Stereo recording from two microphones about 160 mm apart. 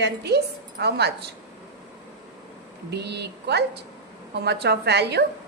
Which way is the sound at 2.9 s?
90° right.